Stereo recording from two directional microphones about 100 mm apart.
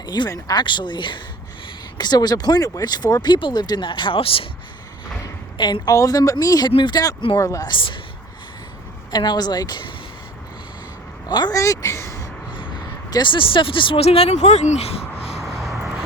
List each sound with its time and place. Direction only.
0.0 s speech: 40° left (ahead or behind); by 4.4 s 65° left (ahead or behind)
5.5 s a woman's voice: 45° left (ahead or behind)
6.7 s speech: 50° left (ahead or behind)
7.3 s a woman's voice: 35° left (ahead or behind)
7.7 s speech: 60° left (ahead or behind)
9.1 s speech: 45° left (ahead or behind)
11.3 s speech: 50° left (ahead or behind)
11.5 s a sound: 35° left (ahead or behind)
13.1 s speech: 50° left (ahead or behind)
14.0 s speech: 85° left
15.4 s vehicle: centre (ahead or behind)